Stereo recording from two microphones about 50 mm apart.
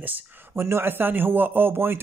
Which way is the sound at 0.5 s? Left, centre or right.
Right.